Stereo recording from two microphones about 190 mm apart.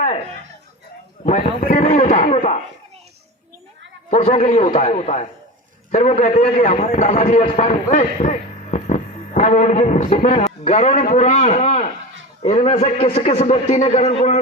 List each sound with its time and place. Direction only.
1.2 s a man's voice: 45° left (ahead or behind)
4.1 s a man's voice: 35° left (ahead or behind)